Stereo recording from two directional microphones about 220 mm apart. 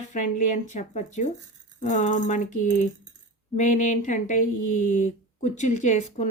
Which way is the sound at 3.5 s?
35° left (ahead or behind).